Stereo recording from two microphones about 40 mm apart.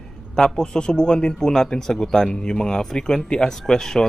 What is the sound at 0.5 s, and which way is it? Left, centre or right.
Speech, centre.